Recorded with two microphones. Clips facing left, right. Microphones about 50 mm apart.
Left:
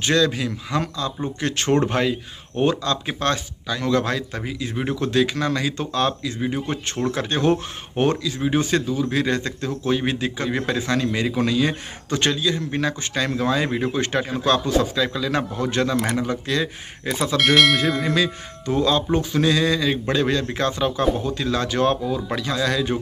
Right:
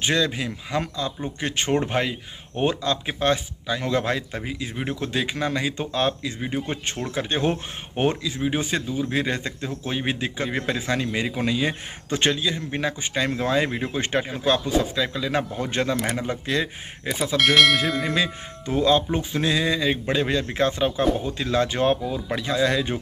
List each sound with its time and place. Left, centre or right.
0.0 s a man's voice: right
14.3 s a man's voice: centre
17.0 s speech: centre
18.0 s a man's voice: right